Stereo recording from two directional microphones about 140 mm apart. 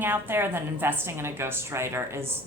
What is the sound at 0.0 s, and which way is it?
A woman's voice, 15° right (ahead or behind).